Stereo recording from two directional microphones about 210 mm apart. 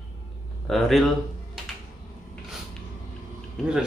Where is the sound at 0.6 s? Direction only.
Centre (ahead or behind).